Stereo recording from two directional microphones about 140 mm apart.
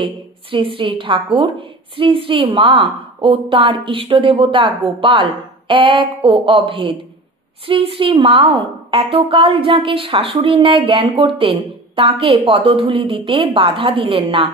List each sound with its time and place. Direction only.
0.0 s a woman's voice: 40° right (ahead or behind)